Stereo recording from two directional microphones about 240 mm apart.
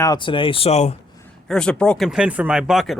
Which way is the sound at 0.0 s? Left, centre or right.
Centre.